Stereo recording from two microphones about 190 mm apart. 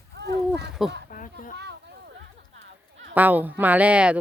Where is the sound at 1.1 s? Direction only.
45° left (ahead or behind).